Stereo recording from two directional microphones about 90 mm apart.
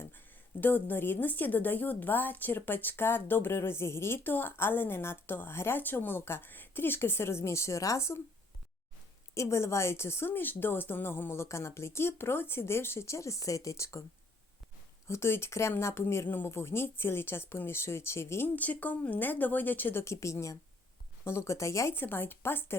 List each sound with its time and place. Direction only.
0.0 s a woman's voice: 20° left (ahead or behind)
9.3 s a woman's voice: 35° left (ahead or behind)
15.0 s a woman's voice: 30° left (ahead or behind)